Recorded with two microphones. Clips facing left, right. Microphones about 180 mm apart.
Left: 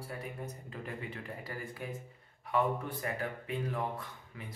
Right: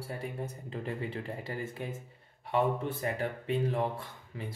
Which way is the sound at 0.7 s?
30° right (ahead or behind).